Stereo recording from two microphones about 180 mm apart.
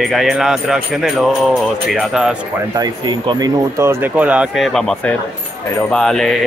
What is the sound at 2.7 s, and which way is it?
Speech, 25° right (ahead or behind).